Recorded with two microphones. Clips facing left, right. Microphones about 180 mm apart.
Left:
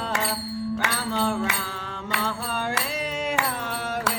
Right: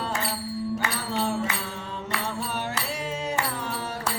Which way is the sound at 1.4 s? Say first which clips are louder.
Left 1 dB; 70° left (ahead or behind).